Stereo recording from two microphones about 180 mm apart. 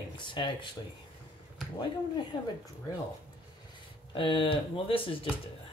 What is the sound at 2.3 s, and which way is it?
Speech, 20° left (ahead or behind).